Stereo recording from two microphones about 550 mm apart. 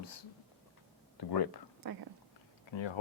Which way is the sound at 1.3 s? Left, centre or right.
Left.